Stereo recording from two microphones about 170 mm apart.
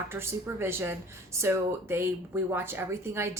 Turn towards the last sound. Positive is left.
turn(degrees=-15)  # may be behind; listen again after turning